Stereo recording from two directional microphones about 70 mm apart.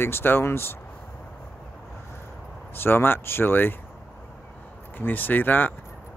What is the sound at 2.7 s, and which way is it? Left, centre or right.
Speech, left.